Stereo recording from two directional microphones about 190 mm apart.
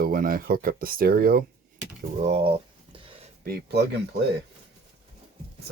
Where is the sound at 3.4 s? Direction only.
55° right (ahead or behind).